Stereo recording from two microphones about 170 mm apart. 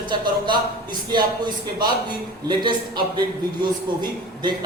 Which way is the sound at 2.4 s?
25° right (ahead or behind).